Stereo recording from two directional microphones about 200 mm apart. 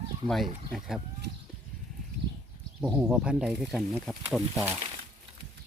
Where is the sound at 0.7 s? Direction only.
Centre (ahead or behind).